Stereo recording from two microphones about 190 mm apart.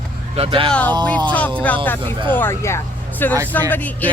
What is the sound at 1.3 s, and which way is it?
Speech, 5° left (ahead or behind).